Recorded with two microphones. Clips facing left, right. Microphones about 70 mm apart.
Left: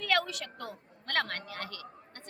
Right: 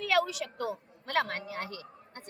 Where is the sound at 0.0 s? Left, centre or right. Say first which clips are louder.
Right 2 dB; centre.